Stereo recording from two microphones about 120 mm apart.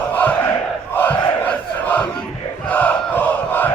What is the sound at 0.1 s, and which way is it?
Crowd, 15° left (ahead or behind).